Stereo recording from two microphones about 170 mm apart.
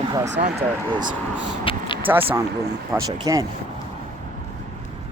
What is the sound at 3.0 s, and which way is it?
Speech, 20° right (ahead or behind).